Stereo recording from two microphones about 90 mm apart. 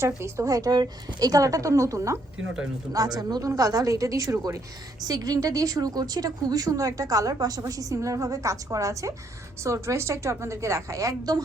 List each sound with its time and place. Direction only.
0.2 s a woman's voice: 35° right (ahead or behind)
2.9 s a woman's voice: 45° right (ahead or behind)